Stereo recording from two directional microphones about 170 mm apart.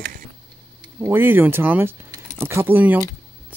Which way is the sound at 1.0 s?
10° right (ahead or behind).